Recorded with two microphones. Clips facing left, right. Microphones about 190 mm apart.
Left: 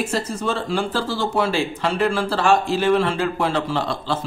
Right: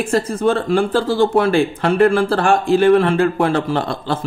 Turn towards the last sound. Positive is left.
turn(degrees=-55)  # may be behind; listen again after turning